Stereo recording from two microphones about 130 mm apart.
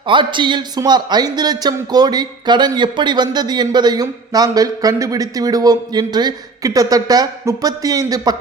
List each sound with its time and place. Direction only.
0.1 s speech: 40° right (ahead or behind)